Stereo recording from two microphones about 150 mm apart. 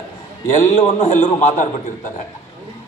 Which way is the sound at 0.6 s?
55° left (ahead or behind).